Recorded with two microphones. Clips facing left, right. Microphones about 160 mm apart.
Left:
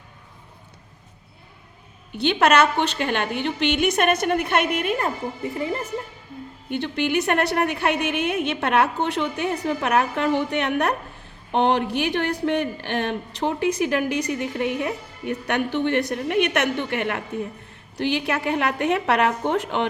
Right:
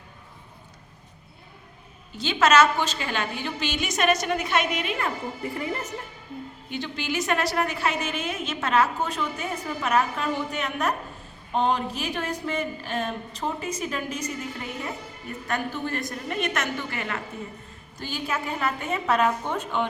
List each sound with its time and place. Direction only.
2.1 s a woman's voice: 60° left (ahead or behind); by 5.1 s 45° left (ahead or behind)
5.4 s speech: 25° left (ahead or behind)
6.7 s a woman's voice: 60° left (ahead or behind); by 19.9 s 80° left